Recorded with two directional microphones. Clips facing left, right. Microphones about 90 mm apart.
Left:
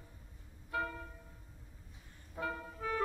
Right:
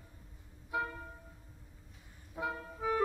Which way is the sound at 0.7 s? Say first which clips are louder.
Right 1 dB; 15° right (ahead or behind).